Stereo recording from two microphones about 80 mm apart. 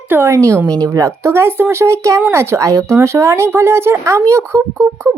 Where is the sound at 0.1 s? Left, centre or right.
Right.